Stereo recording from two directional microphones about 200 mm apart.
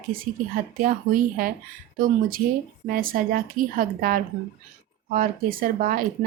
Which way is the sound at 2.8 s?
45° right (ahead or behind).